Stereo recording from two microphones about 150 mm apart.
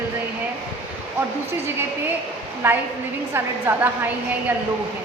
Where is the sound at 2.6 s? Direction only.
15° right (ahead or behind).